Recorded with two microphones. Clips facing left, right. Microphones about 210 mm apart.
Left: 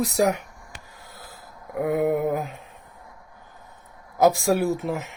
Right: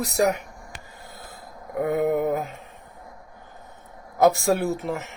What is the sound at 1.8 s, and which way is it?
Speech, 5° left (ahead or behind).